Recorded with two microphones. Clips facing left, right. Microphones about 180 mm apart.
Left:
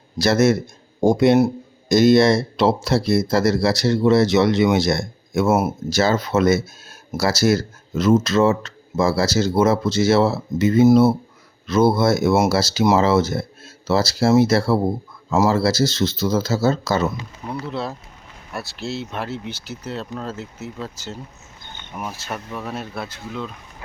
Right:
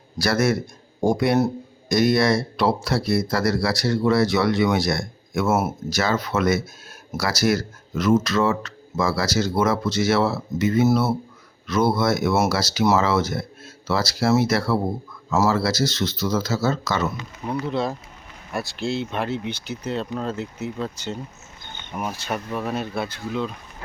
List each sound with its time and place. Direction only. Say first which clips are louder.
0.2 s speech: left 4 dB; 25° left (ahead or behind)
17.5 s speech: right 3 dB; centre (ahead or behind)